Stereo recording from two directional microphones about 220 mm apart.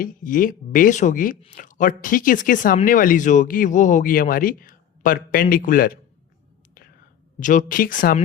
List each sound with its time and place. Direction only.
0.0 s speech: 40° left (ahead or behind)
7.3 s speech: 35° left (ahead or behind)